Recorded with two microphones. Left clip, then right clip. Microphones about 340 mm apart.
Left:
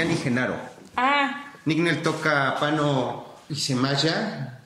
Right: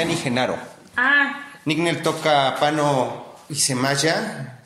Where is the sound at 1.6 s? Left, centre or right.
Centre.